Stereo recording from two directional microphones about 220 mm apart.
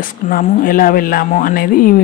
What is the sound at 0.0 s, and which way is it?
Speech, 35° left (ahead or behind).